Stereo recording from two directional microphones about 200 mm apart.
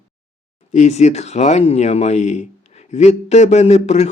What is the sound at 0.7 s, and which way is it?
Speech, 35° left (ahead or behind).